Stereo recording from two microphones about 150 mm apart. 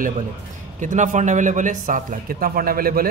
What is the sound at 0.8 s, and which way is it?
Speech, 55° right (ahead or behind).